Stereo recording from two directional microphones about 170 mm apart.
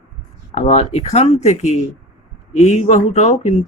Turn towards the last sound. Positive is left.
turn(degrees=40)  # may be behind; listen again after turning